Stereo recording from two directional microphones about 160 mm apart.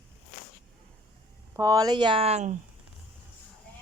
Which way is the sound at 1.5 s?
20° right (ahead or behind).